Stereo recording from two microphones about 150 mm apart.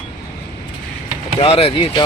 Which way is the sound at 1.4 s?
40° left (ahead or behind).